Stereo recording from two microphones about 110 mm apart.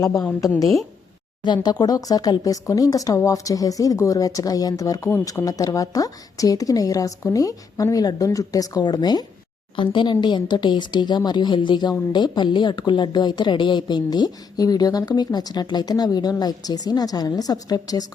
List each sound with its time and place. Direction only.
0.1 s a woman's voice: 5° left (ahead or behind)
1.5 s speech: 35° left (ahead or behind)